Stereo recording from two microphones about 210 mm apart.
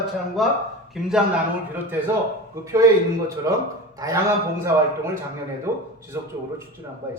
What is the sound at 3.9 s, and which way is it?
A man's voice, 15° right (ahead or behind).